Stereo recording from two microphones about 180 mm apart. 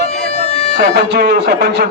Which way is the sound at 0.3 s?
35° left (ahead or behind).